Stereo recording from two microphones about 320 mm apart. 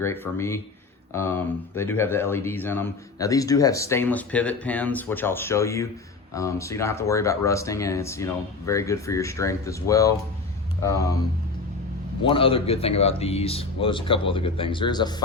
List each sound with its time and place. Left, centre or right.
0.0 s speech: centre
12.2 s speech: centre